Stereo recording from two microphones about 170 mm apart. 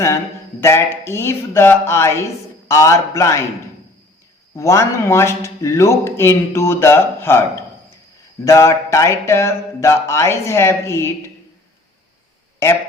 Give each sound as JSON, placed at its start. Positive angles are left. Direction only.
{"t": 0.6, "sound": "speech", "side_deg": 15}
{"t": 4.5, "sound": "speech", "side_deg": 15}
{"t": 12.6, "sound": "a man's voice", "side_deg": 15}